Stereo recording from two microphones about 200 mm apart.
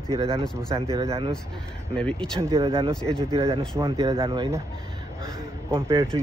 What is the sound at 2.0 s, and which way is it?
Speech, 5° left (ahead or behind).